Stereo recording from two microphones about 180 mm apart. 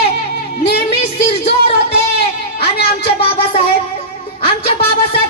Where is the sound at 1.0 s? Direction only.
35° left (ahead or behind).